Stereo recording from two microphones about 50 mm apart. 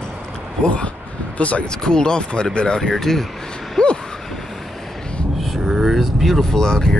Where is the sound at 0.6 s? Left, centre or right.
Left.